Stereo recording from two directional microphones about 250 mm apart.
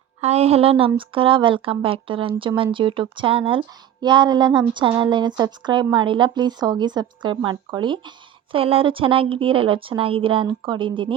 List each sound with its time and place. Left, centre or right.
0.2 s a woman's voice: right